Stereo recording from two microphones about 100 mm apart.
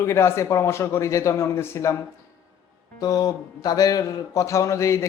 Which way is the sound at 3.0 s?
40° left (ahead or behind).